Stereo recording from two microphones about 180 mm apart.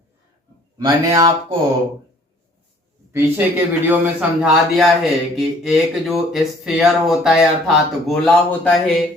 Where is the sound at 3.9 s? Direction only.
5° right (ahead or behind).